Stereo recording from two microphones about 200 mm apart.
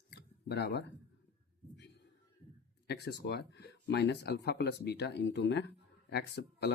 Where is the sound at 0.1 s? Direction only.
55° left (ahead or behind).